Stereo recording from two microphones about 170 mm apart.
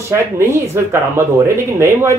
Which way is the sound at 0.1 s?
15° right (ahead or behind).